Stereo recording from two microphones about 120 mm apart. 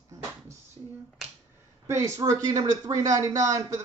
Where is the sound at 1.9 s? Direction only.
25° right (ahead or behind).